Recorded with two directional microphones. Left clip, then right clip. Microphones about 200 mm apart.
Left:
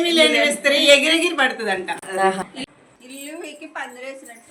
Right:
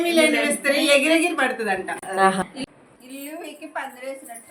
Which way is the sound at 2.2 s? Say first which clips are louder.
Right 1 dB; 35° right (ahead or behind).